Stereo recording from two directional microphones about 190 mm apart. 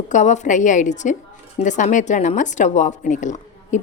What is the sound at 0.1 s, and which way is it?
A woman's voice, 40° left (ahead or behind).